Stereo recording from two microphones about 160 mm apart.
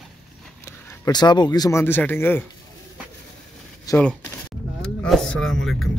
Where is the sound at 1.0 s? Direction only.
25° left (ahead or behind).